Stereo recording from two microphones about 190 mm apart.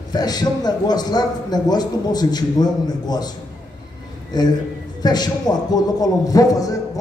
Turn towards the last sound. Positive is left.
turn(degrees=20)  # may be behind; listen again after turning